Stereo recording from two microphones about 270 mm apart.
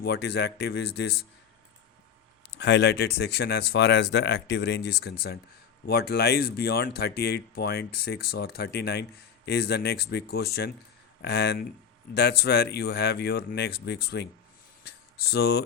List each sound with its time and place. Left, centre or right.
0.0 s speech: left
2.6 s speech: left